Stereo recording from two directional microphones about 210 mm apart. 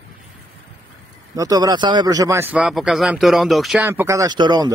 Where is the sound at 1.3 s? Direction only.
15° right (ahead or behind).